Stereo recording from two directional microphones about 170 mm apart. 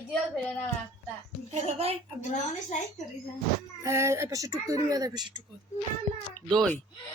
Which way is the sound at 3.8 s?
15° right (ahead or behind).